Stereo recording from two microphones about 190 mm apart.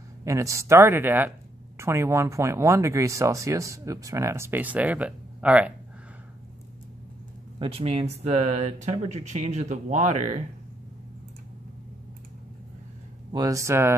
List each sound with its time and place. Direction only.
0.2 s speech: 15° right (ahead or behind)
7.5 s speech: 30° right (ahead or behind)
13.3 s speech: 20° right (ahead or behind)